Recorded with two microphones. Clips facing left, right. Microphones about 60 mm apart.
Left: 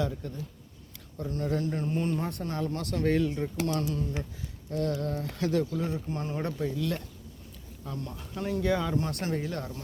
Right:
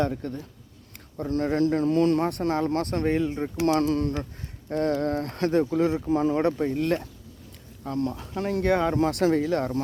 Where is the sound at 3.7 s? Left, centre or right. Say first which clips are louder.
Right 8 dB; right.